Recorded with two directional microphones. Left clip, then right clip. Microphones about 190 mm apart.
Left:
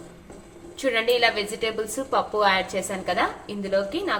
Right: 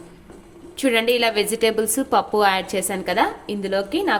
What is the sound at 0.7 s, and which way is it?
A woman's voice, 60° right (ahead or behind).